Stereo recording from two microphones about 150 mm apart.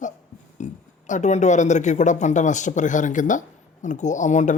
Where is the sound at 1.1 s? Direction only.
55° left (ahead or behind).